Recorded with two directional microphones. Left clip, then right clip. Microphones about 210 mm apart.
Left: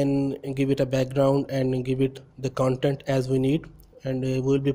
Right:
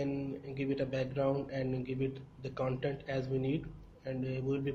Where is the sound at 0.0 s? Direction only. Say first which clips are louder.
Left 13 dB; 50° left (ahead or behind).